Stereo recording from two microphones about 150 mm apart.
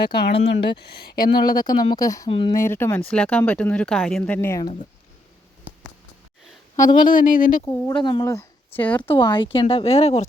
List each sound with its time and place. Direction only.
0.7 s speech: 90° left
1.1 s speech: 30° left (ahead or behind)
2.6 s speech: 15° left (ahead or behind)
4.4 s speech: 15° left (ahead or behind)
6.7 s speech: 25° left (ahead or behind)
7.1 s speech: 65° left (ahead or behind)
7.6 s speech: 20° left (ahead or behind)
9.0 s speech: 35° left (ahead or behind)